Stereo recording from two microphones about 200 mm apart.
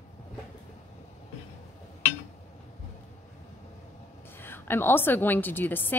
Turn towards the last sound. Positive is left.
turn(degrees=10)  # may be behind; listen again after turning